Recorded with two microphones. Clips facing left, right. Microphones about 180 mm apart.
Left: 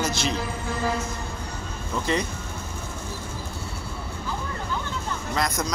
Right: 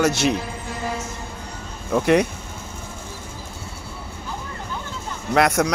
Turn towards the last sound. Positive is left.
turn(degrees=-70)  # may be behind; listen again after turning